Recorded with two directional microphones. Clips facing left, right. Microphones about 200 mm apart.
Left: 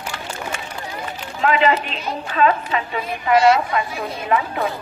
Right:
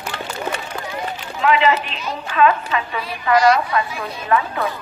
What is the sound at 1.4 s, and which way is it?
A woman's voice, 40° left (ahead or behind).